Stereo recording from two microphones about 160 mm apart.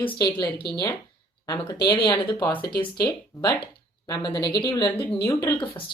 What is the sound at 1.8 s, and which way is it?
Speech, 30° left (ahead or behind).